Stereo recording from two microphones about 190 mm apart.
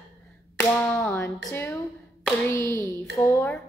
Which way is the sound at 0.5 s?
10° left (ahead or behind).